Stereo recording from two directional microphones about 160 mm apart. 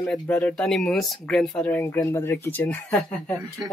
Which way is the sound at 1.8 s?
20° left (ahead or behind).